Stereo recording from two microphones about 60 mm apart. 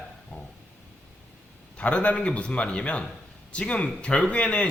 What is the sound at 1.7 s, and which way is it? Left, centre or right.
A man's voice, left.